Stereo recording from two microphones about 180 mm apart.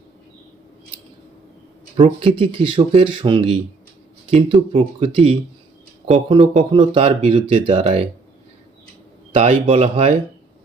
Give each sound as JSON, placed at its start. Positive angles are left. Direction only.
{"t": 2.0, "sound": "speech", "side_deg": -30}
{"t": 9.3, "sound": "speech", "side_deg": -30}